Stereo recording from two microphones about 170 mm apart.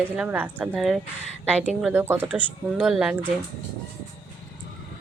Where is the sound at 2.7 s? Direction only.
Centre (ahead or behind).